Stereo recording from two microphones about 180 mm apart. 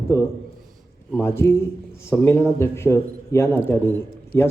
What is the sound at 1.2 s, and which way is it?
A man's voice, 15° left (ahead or behind).